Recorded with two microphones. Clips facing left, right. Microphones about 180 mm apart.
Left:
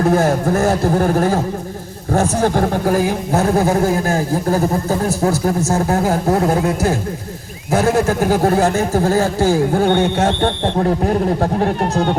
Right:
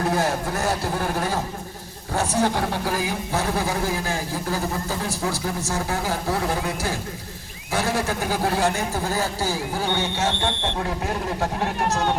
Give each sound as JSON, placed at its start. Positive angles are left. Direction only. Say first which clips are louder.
{"t": 0.0, "sound": "speech", "louder": "left 8 dB", "side_deg": 50}
{"t": 2.4, "sound": "speech", "louder": "left 7 dB", "side_deg": 45}
{"t": 10.4, "sound": "speech", "louder": "left 9 dB", "side_deg": 40}